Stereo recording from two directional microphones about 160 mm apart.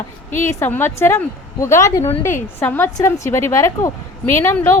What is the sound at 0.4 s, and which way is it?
A woman's voice, 15° left (ahead or behind).